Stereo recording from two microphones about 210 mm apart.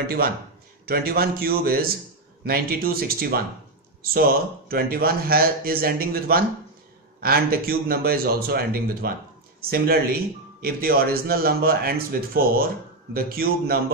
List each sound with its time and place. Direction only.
0.0 s speech: 45° right (ahead or behind)